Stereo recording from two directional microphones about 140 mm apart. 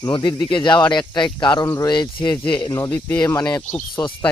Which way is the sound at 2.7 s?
20° left (ahead or behind).